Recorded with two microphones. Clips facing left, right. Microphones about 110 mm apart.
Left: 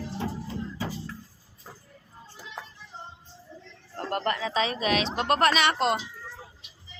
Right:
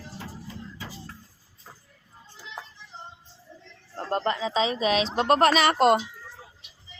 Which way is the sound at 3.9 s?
25° right (ahead or behind).